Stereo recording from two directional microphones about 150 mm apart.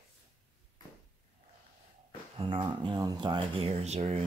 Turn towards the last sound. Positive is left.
turn(degrees=-45)  # may be behind; listen again after turning